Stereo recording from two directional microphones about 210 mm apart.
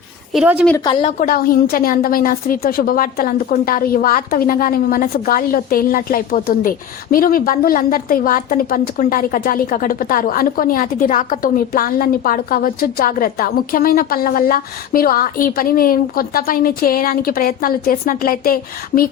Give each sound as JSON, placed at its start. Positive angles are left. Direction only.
{"t": 0.3, "sound": "a woman's voice", "side_deg": -5}
{"t": 1.2, "sound": "a woman's voice", "side_deg": 45}